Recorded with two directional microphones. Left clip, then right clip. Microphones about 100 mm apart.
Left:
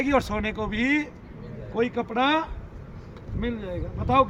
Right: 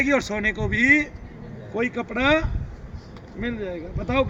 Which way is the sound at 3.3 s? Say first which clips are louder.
Right 2 dB; 25° left (ahead or behind).